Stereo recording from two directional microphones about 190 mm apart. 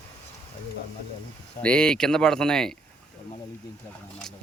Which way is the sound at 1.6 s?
5° left (ahead or behind).